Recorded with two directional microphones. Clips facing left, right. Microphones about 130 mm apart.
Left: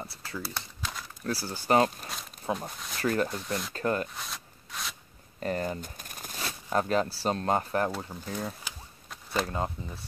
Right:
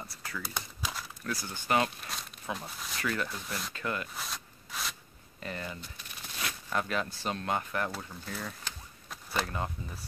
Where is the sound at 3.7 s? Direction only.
40° left (ahead or behind).